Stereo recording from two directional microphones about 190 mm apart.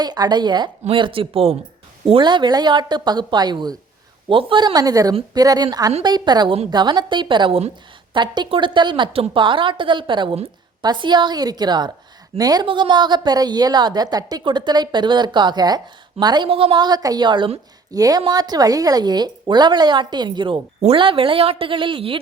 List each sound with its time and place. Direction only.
0.0 s speech: 20° right (ahead or behind)